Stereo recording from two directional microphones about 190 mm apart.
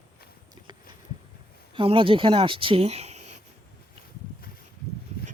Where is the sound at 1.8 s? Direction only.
30° right (ahead or behind).